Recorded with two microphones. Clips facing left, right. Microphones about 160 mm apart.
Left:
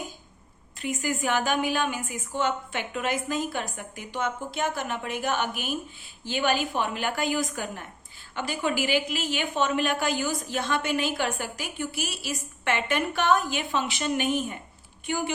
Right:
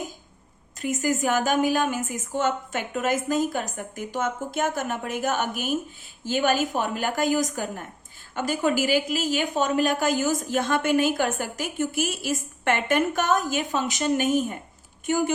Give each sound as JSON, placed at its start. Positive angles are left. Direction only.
{"t": 0.8, "sound": "a woman's voice", "side_deg": -40}